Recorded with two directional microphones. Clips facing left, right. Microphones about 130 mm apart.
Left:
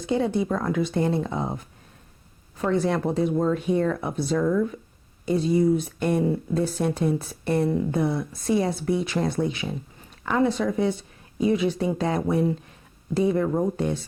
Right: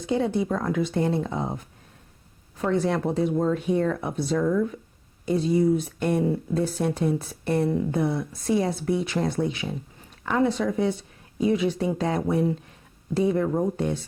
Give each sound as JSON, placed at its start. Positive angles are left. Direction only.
{"t": 0.1, "sound": "speech", "side_deg": 20}
{"t": 2.6, "sound": "speech", "side_deg": 25}